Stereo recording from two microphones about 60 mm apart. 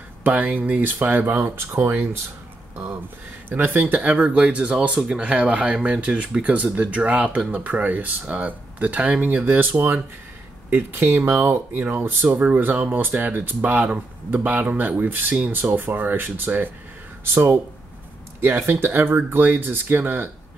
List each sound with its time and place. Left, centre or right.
0.2 s speech: right
3.4 s speech: right
9.4 s speech: right
12.3 s speech: right
18.7 s speech: right